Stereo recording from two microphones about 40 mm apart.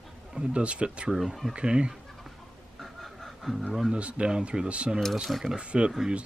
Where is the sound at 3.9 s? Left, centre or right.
Right.